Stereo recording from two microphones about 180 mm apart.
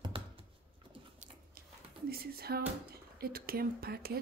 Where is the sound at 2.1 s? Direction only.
60° right (ahead or behind).